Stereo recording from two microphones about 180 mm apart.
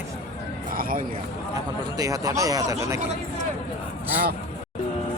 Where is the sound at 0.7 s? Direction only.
50° right (ahead or behind).